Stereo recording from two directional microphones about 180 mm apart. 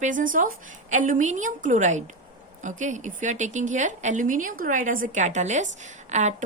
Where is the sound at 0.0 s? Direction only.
45° right (ahead or behind).